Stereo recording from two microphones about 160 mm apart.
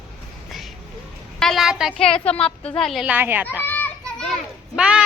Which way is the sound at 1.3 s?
Centre (ahead or behind).